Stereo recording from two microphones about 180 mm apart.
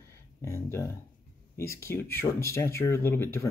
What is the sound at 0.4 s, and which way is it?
Speech, 15° left (ahead or behind).